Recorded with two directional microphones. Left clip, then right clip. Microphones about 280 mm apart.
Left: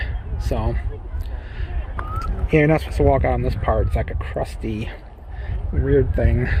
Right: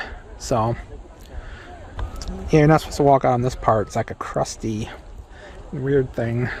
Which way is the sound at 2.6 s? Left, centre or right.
Centre.